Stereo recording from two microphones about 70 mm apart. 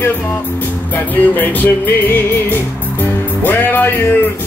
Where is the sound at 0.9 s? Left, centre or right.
Left.